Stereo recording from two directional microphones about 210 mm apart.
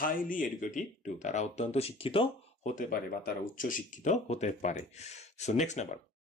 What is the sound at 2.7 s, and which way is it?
Speech, 40° left (ahead or behind).